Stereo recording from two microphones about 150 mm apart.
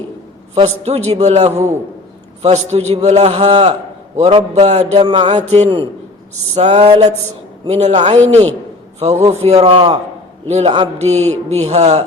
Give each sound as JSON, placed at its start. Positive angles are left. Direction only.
{"t": 0.5, "sound": "a man's voice", "side_deg": -45}